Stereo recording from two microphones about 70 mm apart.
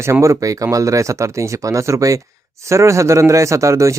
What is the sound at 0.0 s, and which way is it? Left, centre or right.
Speech, right.